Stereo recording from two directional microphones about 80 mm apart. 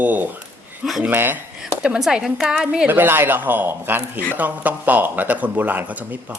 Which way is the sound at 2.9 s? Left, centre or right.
Right.